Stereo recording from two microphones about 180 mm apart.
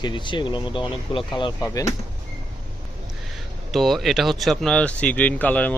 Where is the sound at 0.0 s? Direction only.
25° left (ahead or behind).